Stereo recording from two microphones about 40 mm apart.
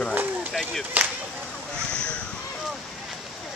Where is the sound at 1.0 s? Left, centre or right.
Right.